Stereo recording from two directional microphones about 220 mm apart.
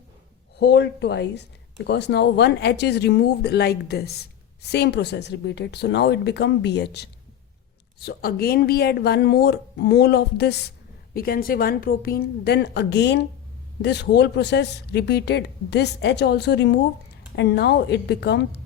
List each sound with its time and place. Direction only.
0.6 s speech: 50° left (ahead or behind)